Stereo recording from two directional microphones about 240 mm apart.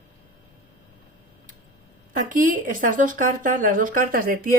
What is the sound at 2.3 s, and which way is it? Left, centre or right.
Speech, right.